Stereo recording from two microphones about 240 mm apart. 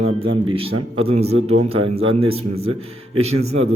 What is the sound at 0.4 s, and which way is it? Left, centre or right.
Speech, right.